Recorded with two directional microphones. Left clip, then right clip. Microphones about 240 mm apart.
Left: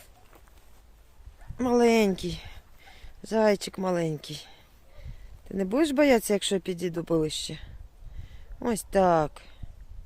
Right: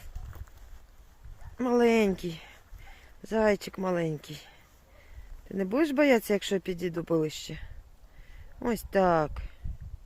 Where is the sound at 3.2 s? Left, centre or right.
Centre.